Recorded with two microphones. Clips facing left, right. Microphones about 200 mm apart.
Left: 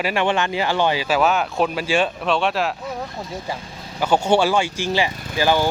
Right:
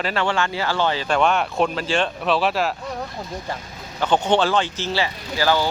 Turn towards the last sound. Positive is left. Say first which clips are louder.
# left 1 dB
turn(degrees=15)  # may be behind; listen again after turning